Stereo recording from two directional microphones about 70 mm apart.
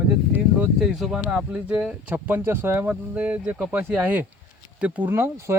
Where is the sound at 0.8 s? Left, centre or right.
Centre.